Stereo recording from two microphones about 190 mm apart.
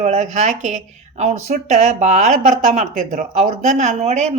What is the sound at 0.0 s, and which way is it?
Speech, 40° right (ahead or behind).